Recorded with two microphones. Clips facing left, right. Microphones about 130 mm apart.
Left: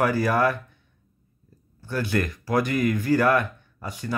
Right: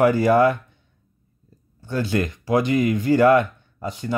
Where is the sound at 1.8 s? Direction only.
25° right (ahead or behind).